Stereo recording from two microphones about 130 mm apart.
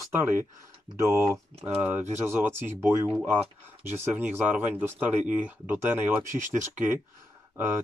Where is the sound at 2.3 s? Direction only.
15° right (ahead or behind).